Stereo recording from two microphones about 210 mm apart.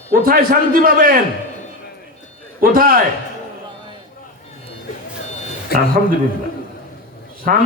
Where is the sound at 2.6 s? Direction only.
45° right (ahead or behind).